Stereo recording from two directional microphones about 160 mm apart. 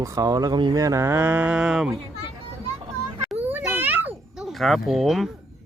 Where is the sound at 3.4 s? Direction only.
10° right (ahead or behind).